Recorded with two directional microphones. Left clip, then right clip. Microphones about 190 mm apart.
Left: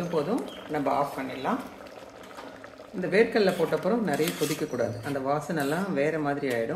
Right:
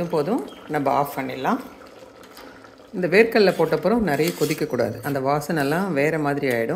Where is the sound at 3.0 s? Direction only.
45° right (ahead or behind).